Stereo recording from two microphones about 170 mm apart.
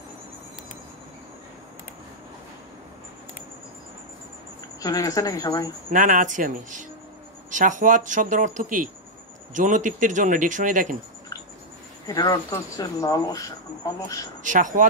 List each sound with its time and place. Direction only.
4.7 s speech: 20° left (ahead or behind)
5.9 s speech: 50° right (ahead or behind)
12.1 s speech: 20° left (ahead or behind)
14.4 s speech: 50° right (ahead or behind)